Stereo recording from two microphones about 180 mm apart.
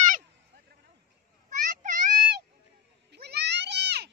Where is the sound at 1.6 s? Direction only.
45° right (ahead or behind).